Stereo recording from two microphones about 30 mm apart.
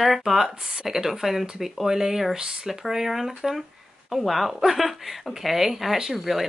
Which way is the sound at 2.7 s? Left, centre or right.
Centre.